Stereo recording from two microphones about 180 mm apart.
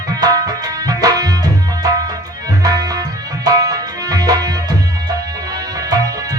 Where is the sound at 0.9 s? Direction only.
20° right (ahead or behind).